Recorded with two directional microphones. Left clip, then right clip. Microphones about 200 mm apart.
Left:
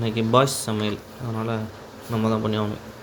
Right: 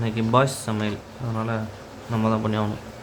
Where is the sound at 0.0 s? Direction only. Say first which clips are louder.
Left 1 dB; 10° left (ahead or behind).